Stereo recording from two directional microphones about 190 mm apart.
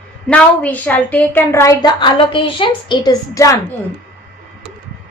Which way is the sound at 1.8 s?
25° left (ahead or behind).